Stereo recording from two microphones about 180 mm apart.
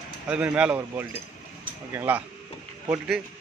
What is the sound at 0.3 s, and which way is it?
A man's voice, 5° right (ahead or behind).